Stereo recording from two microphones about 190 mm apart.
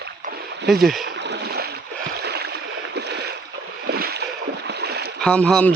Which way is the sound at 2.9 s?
60° right (ahead or behind).